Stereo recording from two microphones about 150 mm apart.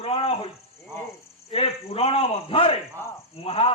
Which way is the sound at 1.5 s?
40° left (ahead or behind).